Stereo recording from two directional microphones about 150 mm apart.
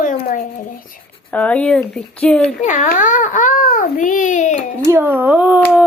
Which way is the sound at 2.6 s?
55° left (ahead or behind).